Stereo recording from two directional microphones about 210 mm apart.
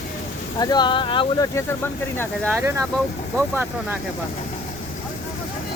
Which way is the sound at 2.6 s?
15° right (ahead or behind).